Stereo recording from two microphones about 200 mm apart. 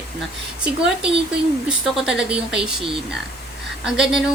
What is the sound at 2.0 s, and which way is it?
Speech, 5° right (ahead or behind).